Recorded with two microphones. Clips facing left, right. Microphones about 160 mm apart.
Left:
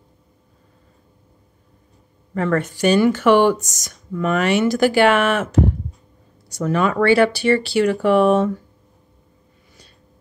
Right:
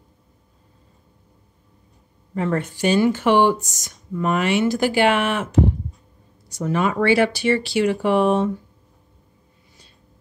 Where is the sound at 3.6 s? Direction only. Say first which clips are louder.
Left 1 dB; 90° left; by 5.0 s 65° left (ahead or behind).